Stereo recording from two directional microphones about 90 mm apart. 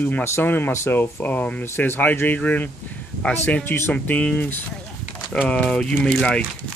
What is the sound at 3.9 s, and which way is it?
Speech, 15° left (ahead or behind).